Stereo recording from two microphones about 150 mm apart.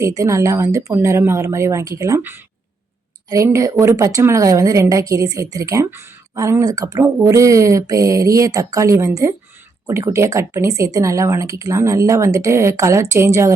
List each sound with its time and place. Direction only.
0.0 s a woman's voice: 20° right (ahead or behind)